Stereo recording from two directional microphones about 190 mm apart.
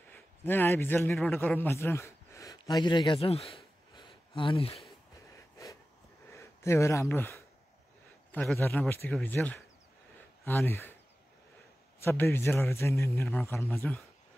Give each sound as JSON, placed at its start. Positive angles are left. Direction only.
{"t": 0.1, "sound": "a man's voice", "side_deg": 10}
{"t": 3.9, "sound": "a sound", "side_deg": 25}
{"t": 5.3, "sound": "snort", "side_deg": 15}
{"t": 6.3, "sound": "a man's voice", "side_deg": 15}
{"t": 12.0, "sound": "a man's voice", "side_deg": 15}